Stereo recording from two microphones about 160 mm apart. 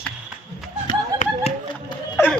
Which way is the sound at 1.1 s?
25° right (ahead or behind).